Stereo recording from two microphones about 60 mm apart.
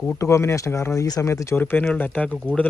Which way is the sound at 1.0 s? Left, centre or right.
Left.